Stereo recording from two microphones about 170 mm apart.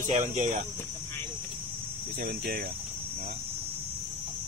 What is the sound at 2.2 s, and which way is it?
Speech, 60° right (ahead or behind).